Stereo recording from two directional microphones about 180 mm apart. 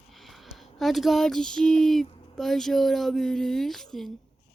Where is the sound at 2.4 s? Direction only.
Centre (ahead or behind).